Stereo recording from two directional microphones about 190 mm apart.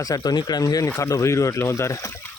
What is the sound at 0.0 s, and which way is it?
Speech, 20° left (ahead or behind).